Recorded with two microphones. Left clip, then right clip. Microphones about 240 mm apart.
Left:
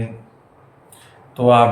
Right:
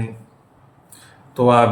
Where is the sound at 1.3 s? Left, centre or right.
Right.